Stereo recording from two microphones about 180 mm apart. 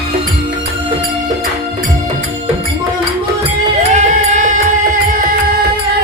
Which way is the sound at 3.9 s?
40° right (ahead or behind).